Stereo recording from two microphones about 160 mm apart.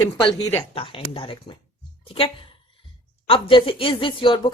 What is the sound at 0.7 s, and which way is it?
A woman's voice, 35° left (ahead or behind).